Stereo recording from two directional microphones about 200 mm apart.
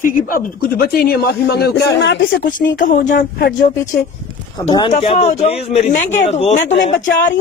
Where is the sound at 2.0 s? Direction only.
60° left (ahead or behind).